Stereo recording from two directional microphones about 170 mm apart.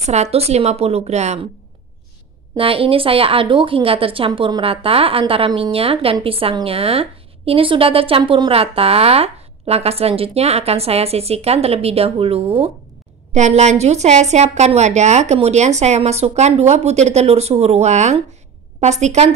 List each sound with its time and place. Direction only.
0.0 s a woman's voice: 40° right (ahead or behind)
2.5 s a woman's voice: 35° right (ahead or behind)